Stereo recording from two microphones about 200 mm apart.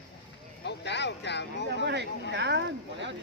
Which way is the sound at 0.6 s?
60° left (ahead or behind).